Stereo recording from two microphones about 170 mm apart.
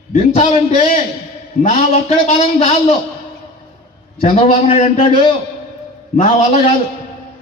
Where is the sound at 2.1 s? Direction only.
35° left (ahead or behind).